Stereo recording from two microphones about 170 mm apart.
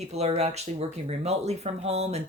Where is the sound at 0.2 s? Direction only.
40° right (ahead or behind).